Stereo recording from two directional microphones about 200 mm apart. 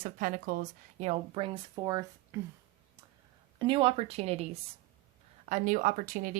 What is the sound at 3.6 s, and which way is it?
A woman's voice, 25° right (ahead or behind).